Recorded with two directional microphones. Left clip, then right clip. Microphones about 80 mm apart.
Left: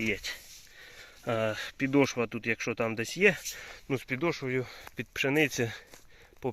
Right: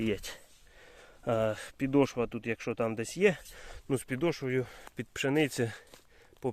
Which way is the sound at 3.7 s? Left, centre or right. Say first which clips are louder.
Even; right.